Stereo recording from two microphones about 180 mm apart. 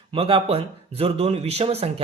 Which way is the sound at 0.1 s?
30° right (ahead or behind).